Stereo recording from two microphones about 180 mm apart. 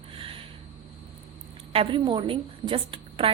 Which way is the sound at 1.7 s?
30° right (ahead or behind).